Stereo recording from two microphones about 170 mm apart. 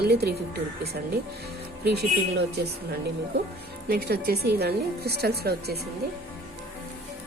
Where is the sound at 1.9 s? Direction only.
75° right (ahead or behind).